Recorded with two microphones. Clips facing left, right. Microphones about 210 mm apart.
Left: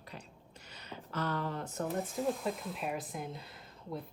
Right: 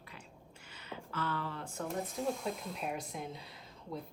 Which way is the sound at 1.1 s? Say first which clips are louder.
Left 3 dB; 40° left (ahead or behind).